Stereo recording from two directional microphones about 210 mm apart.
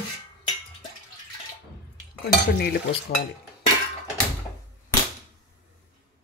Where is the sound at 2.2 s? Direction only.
50° left (ahead or behind).